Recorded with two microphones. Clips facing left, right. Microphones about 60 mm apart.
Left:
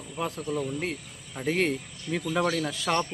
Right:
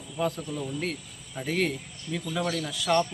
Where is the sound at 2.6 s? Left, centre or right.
Left.